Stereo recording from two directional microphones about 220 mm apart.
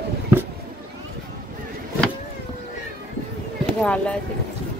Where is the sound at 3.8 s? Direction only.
5° left (ahead or behind).